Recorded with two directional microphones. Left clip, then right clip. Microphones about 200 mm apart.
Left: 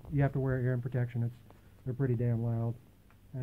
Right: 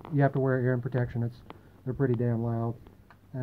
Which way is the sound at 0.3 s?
15° left (ahead or behind).